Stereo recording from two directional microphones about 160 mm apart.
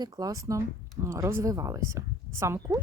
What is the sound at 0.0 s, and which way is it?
A woman's voice, 25° right (ahead or behind).